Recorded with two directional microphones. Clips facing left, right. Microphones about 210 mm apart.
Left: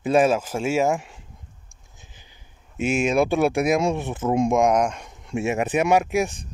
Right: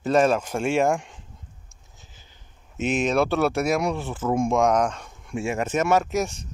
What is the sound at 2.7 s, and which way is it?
Speech, 10° left (ahead or behind).